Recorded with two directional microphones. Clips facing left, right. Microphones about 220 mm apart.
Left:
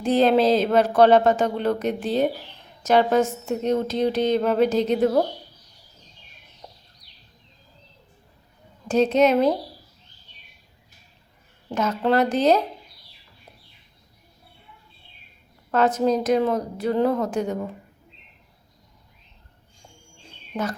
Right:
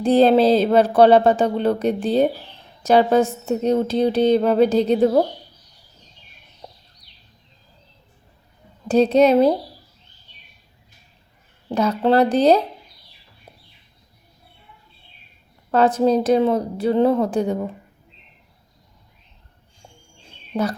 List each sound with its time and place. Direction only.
0.0 s speech: 35° right (ahead or behind)
8.9 s speech: 35° right (ahead or behind)
11.7 s speech: 35° right (ahead or behind)
15.7 s speech: 30° right (ahead or behind)
20.5 s speech: 35° right (ahead or behind)